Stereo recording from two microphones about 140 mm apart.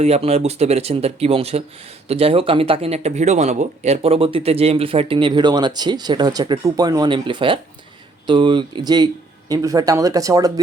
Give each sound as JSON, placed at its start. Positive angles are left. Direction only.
{"t": 0.0, "sound": "speech", "side_deg": -50}